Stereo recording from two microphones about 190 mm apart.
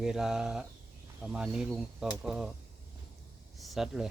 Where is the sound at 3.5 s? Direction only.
Centre (ahead or behind).